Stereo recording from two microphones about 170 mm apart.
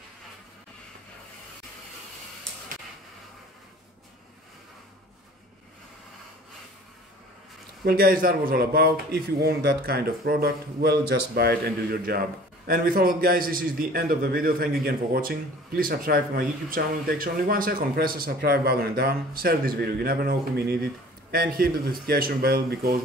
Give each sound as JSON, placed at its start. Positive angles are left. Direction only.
{"t": 7.8, "sound": "a man's voice", "side_deg": -60}